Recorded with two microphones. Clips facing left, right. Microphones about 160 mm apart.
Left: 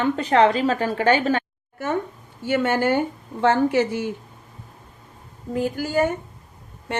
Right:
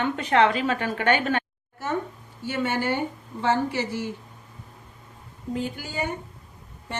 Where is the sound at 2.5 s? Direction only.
50° left (ahead or behind).